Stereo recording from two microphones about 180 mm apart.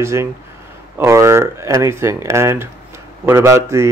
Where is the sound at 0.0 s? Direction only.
15° right (ahead or behind).